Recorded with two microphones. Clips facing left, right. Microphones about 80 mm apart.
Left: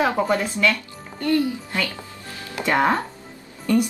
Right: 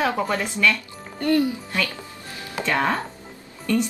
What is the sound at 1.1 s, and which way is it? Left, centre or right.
Speech, right.